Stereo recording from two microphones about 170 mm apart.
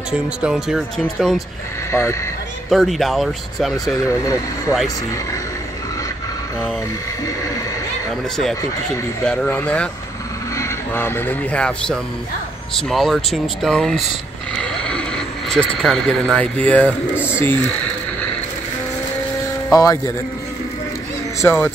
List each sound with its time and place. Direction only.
0.1 s speech: 5° right (ahead or behind)
1.9 s speech: 15° left (ahead or behind)
2.7 s speech: centre (ahead or behind)
9.2 s speech: 5° left (ahead or behind)
14.6 s a sound: 5° left (ahead or behind)
15.5 s speech: 5° left (ahead or behind)
16.8 s speech: 10° right (ahead or behind)
17.3 s speech: 15° left (ahead or behind)
19.7 s speech: 20° left (ahead or behind)
21.4 s speech: 10° left (ahead or behind)